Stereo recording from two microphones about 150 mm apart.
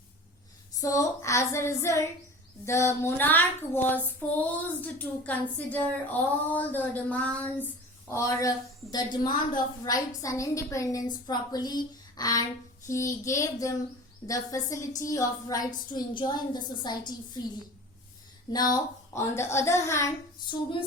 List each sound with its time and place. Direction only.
0.8 s a woman's voice: 20° left (ahead or behind)
2.6 s child singing: 20° left (ahead or behind)
8.0 s a woman's voice: 20° left (ahead or behind)
18.5 s child singing: 25° left (ahead or behind)
20.5 s a sound: 35° left (ahead or behind)